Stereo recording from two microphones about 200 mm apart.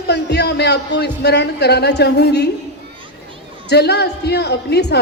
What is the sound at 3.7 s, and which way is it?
A woman's voice, 55° left (ahead or behind).